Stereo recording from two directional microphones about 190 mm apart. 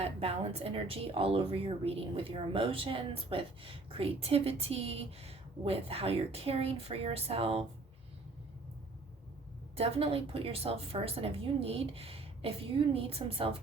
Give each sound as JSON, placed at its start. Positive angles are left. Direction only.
{"t": 0.0, "sound": "a woman's voice", "side_deg": -30}
{"t": 9.7, "sound": "a woman's voice", "side_deg": -30}